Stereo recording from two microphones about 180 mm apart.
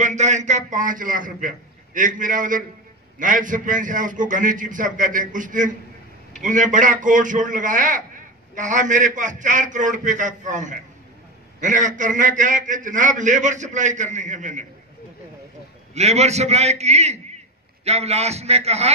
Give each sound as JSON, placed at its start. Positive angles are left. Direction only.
{"t": 0.0, "sound": "a man's voice", "side_deg": -40}
{"t": 15.9, "sound": "a man's voice", "side_deg": -35}